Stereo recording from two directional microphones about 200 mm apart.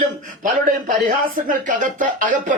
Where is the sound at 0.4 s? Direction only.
40° right (ahead or behind).